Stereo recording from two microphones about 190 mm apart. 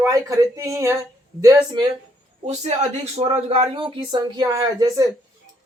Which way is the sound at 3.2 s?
30° right (ahead or behind).